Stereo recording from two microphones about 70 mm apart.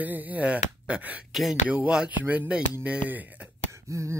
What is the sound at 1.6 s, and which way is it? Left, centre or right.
Speech, centre.